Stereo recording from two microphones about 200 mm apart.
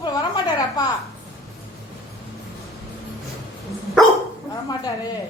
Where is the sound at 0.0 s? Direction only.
20° left (ahead or behind).